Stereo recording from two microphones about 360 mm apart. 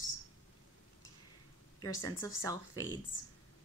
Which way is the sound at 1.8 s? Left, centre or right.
Centre.